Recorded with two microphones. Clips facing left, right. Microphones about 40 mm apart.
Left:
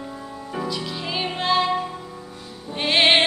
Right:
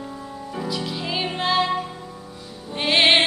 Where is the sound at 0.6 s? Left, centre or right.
Centre.